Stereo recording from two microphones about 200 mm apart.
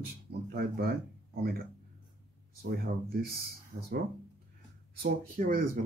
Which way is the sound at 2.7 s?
50° right (ahead or behind).